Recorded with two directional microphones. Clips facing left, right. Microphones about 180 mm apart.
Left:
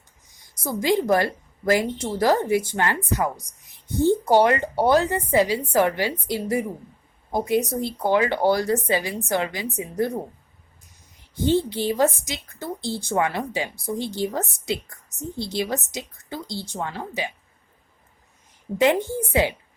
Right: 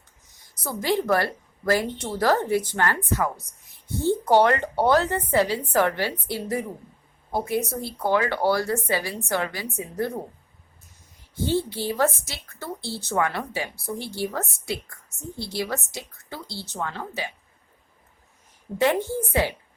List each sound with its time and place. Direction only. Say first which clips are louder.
0.6 s a woman's voice: left 3 dB; 15° left (ahead or behind)
11.3 s a woman's voice: left 4 dB; 20° left (ahead or behind)
18.8 s a woman's voice: left 2 dB; 15° left (ahead or behind)